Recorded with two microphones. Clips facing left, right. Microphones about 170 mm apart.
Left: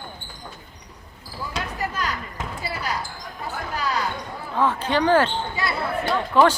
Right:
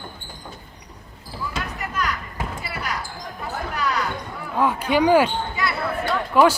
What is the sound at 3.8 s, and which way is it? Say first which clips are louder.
Basketball bounce: right 1 dB; 30° left (ahead or behind).